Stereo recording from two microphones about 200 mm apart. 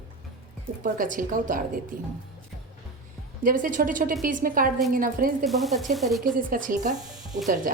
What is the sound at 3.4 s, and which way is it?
A woman's voice, 40° right (ahead or behind).